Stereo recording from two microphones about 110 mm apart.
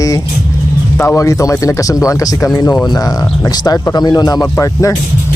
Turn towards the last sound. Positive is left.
turn(degrees=30)  # may be behind; listen again after turning